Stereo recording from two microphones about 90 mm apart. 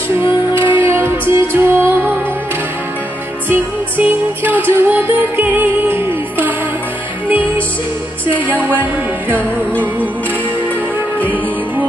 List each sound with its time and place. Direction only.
0.6 s music: 20° right (ahead or behind)
4.0 s music: 20° right (ahead or behind)
8.5 s music: 20° right (ahead or behind)